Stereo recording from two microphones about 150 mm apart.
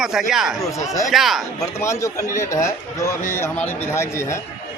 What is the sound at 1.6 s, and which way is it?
A man's voice, 20° left (ahead or behind).